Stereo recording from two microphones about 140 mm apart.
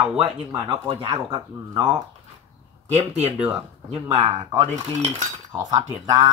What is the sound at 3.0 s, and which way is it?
Speech, 50° right (ahead or behind).